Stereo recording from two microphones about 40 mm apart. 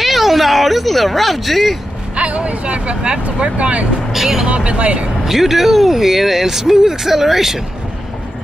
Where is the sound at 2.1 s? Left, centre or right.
Right.